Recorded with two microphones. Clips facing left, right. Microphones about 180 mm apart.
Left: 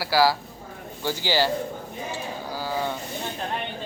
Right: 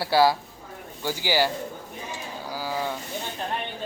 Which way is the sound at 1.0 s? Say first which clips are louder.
Even; 15° right (ahead or behind).